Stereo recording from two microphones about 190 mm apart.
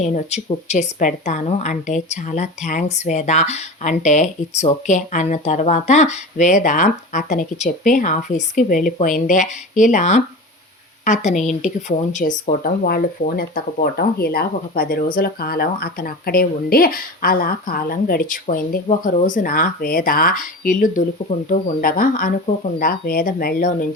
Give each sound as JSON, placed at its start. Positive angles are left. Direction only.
{"t": 0.0, "sound": "a woman's voice", "side_deg": 35}